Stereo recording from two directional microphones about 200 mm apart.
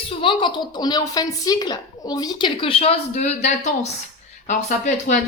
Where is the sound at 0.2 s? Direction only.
25° left (ahead or behind).